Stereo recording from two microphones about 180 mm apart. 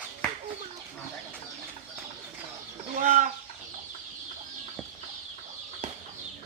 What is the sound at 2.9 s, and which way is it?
Chicken, 45° right (ahead or behind).